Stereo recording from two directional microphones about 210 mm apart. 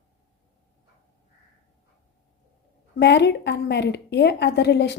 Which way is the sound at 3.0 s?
55° left (ahead or behind).